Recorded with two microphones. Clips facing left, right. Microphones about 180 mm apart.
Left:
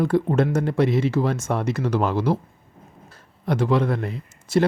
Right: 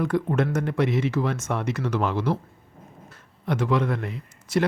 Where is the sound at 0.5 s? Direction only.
30° left (ahead or behind).